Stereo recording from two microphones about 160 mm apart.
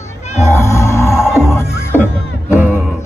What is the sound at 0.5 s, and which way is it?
Music, 15° left (ahead or behind).